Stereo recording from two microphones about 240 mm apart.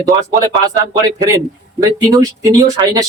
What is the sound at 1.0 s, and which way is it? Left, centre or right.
Speech, centre.